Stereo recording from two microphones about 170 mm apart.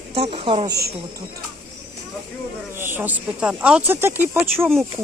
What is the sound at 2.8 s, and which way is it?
Speech, 10° right (ahead or behind).